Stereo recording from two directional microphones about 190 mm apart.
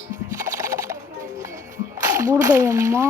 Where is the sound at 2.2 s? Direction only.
15° right (ahead or behind).